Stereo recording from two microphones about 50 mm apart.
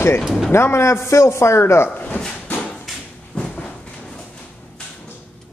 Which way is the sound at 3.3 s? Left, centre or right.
Centre.